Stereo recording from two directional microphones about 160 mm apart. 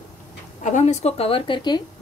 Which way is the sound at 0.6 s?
45° left (ahead or behind).